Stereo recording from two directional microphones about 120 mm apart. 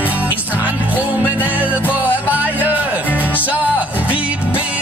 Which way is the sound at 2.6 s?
15° right (ahead or behind).